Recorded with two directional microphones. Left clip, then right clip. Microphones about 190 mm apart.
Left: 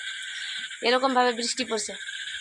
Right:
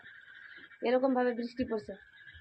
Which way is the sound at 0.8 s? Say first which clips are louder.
Left 7 dB; 15° left (ahead or behind).